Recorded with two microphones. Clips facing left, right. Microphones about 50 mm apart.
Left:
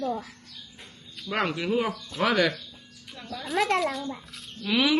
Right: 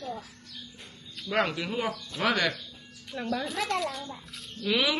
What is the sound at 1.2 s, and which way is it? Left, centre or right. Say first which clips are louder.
Speech: even; centre.